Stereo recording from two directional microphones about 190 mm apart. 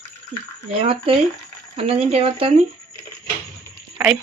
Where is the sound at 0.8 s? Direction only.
30° right (ahead or behind).